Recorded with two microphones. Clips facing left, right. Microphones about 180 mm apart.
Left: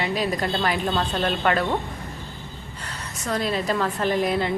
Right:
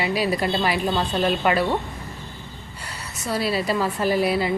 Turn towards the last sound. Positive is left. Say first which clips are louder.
# right 1 dB
turn(degrees=-5)  # may be behind; listen again after turning